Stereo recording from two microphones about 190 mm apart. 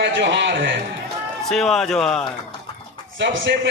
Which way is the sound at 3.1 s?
75° right (ahead or behind).